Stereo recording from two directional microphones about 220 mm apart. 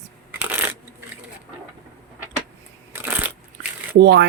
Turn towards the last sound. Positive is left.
turn(degrees=-50)  # may be behind; listen again after turning